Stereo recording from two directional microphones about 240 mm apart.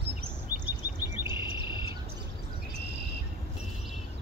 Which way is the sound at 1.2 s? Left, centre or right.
Centre.